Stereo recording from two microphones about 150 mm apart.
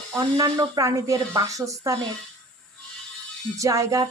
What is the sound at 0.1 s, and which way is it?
A woman's voice, 25° right (ahead or behind).